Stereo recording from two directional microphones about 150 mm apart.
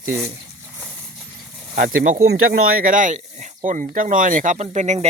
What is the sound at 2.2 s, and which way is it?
Speech, 80° right.